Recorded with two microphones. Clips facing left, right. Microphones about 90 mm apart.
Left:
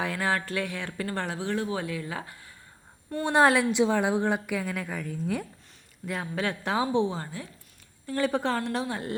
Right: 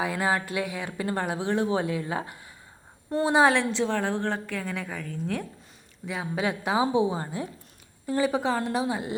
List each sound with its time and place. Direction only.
0.0 s speech: 10° right (ahead or behind)
3.2 s a woman's voice: centre (ahead or behind)
3.7 s a woman's voice: 15° left (ahead or behind)
6.1 s speech: 5° right (ahead or behind)